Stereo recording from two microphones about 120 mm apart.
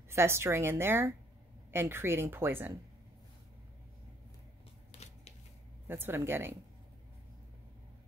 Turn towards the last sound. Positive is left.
turn(degrees=-20)  # may be behind; listen again after turning